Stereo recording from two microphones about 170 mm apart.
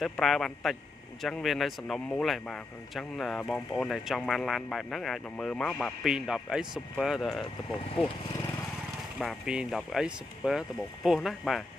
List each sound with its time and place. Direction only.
0.0 s speech: centre (ahead or behind)
8.0 s speech: 30° left (ahead or behind)
9.2 s speech: centre (ahead or behind)